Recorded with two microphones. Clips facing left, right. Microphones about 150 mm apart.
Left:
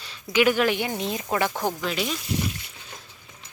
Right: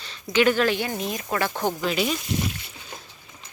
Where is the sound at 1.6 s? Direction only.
Centre (ahead or behind).